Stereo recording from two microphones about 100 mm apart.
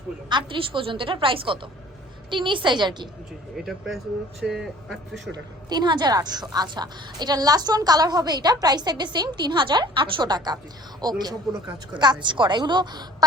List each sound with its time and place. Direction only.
0.3 s a woman's voice: 55° right (ahead or behind)
3.7 s speech: centre (ahead or behind)
5.6 s a woman's voice: 45° right (ahead or behind)
12.2 s a woman's voice: 50° right (ahead or behind)